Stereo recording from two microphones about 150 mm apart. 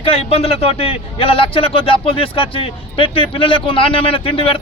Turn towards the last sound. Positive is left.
turn(degrees=35)  # may be behind; listen again after turning